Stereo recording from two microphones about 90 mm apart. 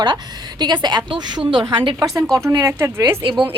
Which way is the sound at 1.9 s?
35° right (ahead or behind).